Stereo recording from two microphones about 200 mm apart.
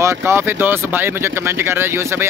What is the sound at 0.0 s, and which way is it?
Speech, 15° right (ahead or behind).